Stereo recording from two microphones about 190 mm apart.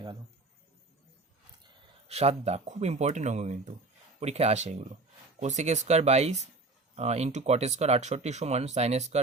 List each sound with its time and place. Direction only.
2.0 s speech: 35° right (ahead or behind)